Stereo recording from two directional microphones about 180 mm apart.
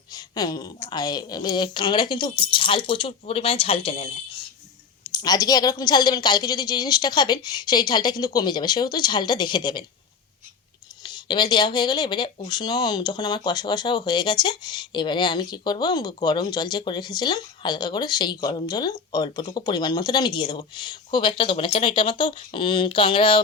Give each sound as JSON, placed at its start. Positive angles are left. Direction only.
{"t": 0.1, "sound": "speech", "side_deg": 20}
{"t": 5.1, "sound": "speech", "side_deg": 20}
{"t": 11.0, "sound": "speech", "side_deg": 25}